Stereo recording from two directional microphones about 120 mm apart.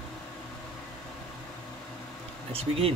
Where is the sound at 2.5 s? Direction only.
55° right (ahead or behind).